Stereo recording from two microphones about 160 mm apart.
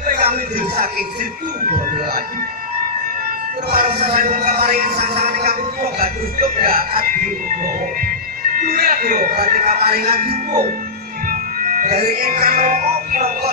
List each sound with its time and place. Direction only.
0.0 s music: 60° right (ahead or behind)
3.7 s music: 65° right (ahead or behind)
5.5 s speech: 65° right (ahead or behind)
8.5 s music: 70° right (ahead or behind)